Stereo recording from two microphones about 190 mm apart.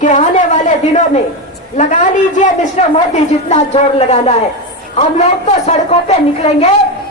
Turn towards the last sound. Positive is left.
turn(degrees=35)  # may be behind; listen again after turning